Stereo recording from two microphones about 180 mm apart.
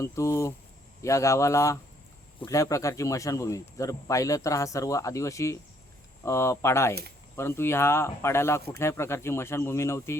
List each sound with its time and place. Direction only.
0.0 s a man's voice: 15° left (ahead or behind)